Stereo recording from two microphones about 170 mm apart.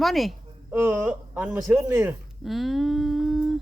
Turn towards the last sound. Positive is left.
turn(degrees=0)  # may be behind; listen again after turning